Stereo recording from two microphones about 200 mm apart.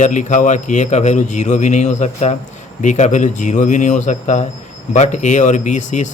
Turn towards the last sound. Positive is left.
turn(degrees=35)  # may be behind; listen again after turning